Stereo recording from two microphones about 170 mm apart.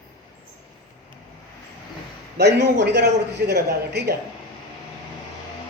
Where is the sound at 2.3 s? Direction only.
80° right.